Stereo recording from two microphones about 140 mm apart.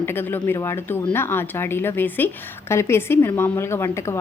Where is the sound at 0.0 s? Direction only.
15° left (ahead or behind).